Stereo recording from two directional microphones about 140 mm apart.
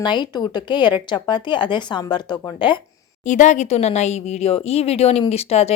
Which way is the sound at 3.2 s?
60° left (ahead or behind).